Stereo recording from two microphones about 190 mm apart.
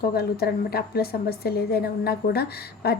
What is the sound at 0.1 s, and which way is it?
A woman's voice, 55° left (ahead or behind).